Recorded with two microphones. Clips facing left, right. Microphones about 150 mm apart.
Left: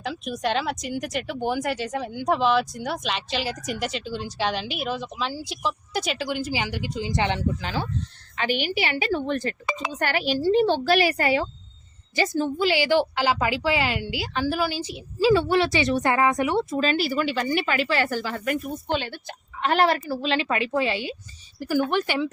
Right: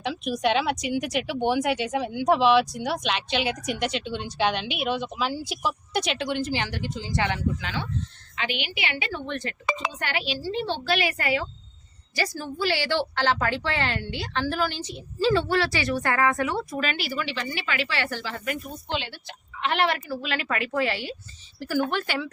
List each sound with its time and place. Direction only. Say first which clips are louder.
0.0 s a woman's voice: right 2 dB; centre (ahead or behind); by 11.4 s 35° left (ahead or behind)
12.1 s a woman's voice: left 6 dB; 20° left (ahead or behind)
16.8 s a woman's voice: left 6 dB; 40° left (ahead or behind); by 22.3 s 15° left (ahead or behind)